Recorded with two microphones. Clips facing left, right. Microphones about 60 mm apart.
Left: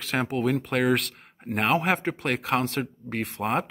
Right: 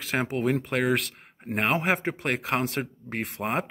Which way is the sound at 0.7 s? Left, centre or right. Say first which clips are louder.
Left 2 dB; centre.